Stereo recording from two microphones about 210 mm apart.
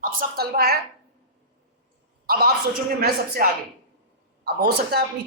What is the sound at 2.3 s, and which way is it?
A woman's voice, 45° right (ahead or behind).